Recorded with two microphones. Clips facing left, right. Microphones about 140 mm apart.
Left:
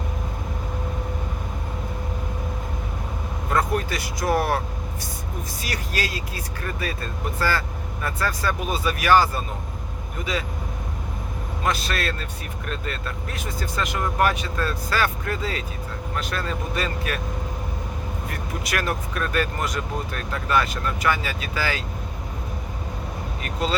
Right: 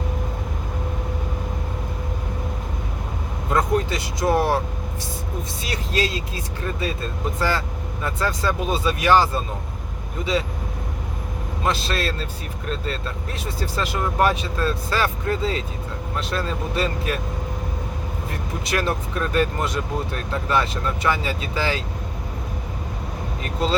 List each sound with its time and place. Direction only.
3.5 s vehicle: 25° right (ahead or behind)
5.6 s speech: 25° right (ahead or behind)
11.6 s speech: 30° right (ahead or behind)
18.3 s speech: 25° right (ahead or behind)
23.4 s speech: 30° right (ahead or behind)